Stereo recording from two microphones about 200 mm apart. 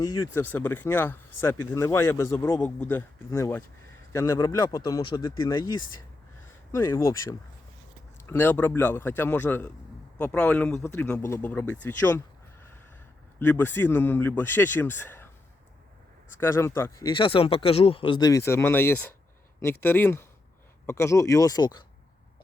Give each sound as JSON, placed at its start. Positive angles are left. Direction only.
{"t": 0.0, "sound": "speech", "side_deg": 20}
{"t": 13.4, "sound": "speech", "side_deg": 10}
{"t": 16.3, "sound": "speech", "side_deg": 15}
{"t": 17.1, "sound": "speech", "side_deg": 25}